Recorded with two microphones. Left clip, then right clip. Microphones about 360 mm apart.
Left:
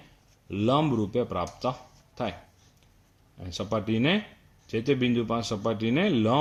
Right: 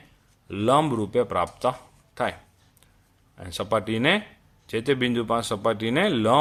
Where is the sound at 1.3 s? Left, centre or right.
Right.